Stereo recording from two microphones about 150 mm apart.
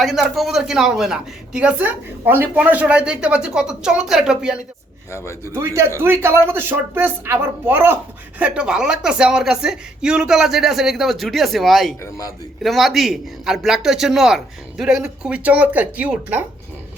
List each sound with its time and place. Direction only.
0.0 s a woman's voice: centre (ahead or behind)
5.1 s speech: 20° left (ahead or behind)
5.5 s a man's voice: 20° right (ahead or behind)